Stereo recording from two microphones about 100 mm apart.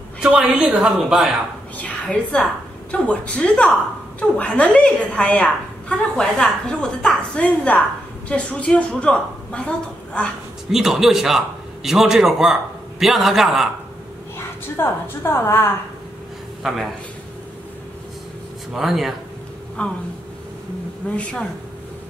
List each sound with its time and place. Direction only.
0.2 s a man's voice: 10° right (ahead or behind)
1.8 s a woman's voice: 10° left (ahead or behind)
10.7 s a man's voice: 5° right (ahead or behind)
14.8 s a woman's voice: 25° left (ahead or behind)
16.6 s a man's voice: 5° right (ahead or behind)
18.7 s a man's voice: centre (ahead or behind)
19.8 s a woman's voice: 10° left (ahead or behind)
21.2 s a woman's voice: 10° left (ahead or behind)